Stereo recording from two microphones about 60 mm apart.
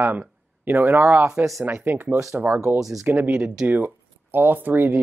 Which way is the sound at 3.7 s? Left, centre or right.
Right.